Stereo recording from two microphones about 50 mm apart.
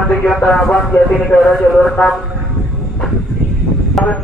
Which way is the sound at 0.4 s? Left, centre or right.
Left.